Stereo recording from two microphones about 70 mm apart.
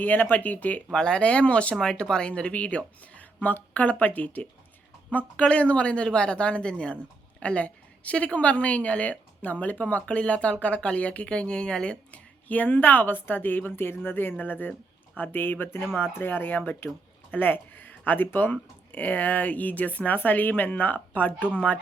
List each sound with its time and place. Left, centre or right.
0.0 s speech: left
0.9 s speech: centre